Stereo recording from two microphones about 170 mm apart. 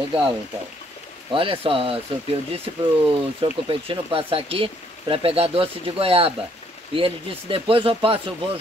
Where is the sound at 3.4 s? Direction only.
30° right (ahead or behind).